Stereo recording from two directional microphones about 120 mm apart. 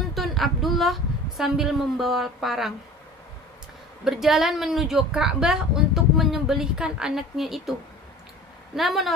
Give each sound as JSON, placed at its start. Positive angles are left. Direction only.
{"t": 0.1, "sound": "a woman's voice", "side_deg": 0}
{"t": 4.0, "sound": "a woman's voice", "side_deg": 0}
{"t": 8.7, "sound": "a woman's voice", "side_deg": 0}